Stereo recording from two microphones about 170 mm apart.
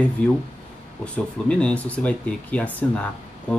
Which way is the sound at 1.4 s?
5° left (ahead or behind).